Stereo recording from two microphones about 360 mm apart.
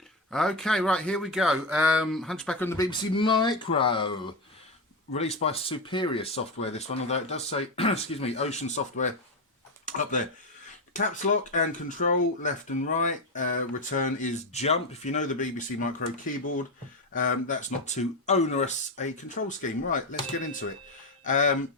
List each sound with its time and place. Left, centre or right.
0.3 s speech: centre
5.1 s speech: centre